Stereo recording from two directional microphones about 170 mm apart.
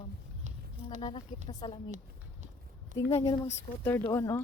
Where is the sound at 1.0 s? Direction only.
30° left (ahead or behind).